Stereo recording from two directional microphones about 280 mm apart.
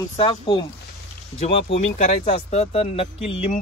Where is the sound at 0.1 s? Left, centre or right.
Centre.